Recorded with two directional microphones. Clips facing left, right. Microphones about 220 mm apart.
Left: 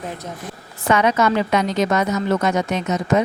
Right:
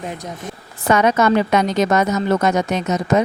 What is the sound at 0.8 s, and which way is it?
A woman's voice, 45° right (ahead or behind).